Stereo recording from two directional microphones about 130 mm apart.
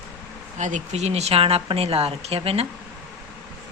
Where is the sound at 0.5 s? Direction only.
70° right (ahead or behind); by 2.7 s 50° right (ahead or behind).